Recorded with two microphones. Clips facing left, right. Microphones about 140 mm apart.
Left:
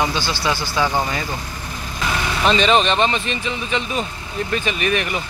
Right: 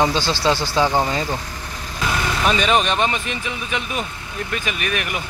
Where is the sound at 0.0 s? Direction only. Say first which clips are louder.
Right 3 dB; 30° right (ahead or behind).